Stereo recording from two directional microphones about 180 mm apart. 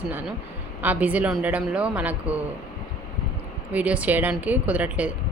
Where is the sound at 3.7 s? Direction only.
10° right (ahead or behind).